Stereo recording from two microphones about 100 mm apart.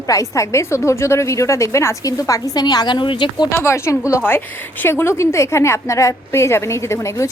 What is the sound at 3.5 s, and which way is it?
A woman's voice, 25° left (ahead or behind).